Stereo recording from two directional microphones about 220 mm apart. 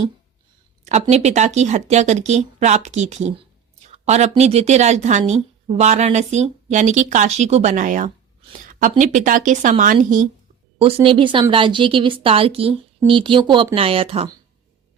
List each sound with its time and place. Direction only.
1.1 s speech: 30° right (ahead or behind)
11.0 s a woman's voice: 20° right (ahead or behind)